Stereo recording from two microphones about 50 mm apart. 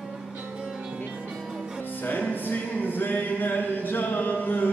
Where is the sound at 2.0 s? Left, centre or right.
Left.